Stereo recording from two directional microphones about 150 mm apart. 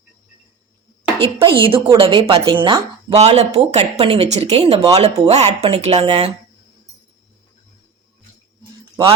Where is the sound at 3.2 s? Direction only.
45° right (ahead or behind).